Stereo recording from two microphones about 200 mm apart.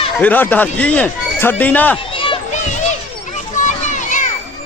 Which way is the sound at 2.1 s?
25° left (ahead or behind).